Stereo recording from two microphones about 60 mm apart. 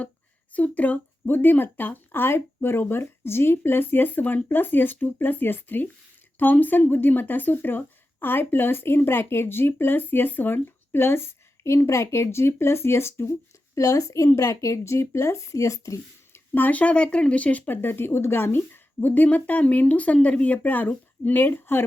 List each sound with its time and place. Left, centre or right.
0.5 s speech: left
13.7 s speech: left
16.3 s speech: left